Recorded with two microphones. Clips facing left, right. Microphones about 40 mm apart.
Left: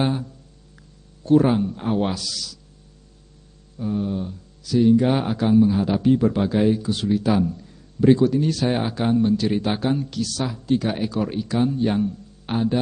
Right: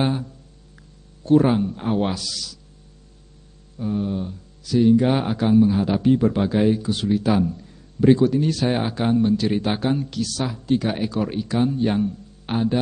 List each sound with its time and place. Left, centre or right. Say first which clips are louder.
0.0 s speech: even; right
3.7 s speech: even; right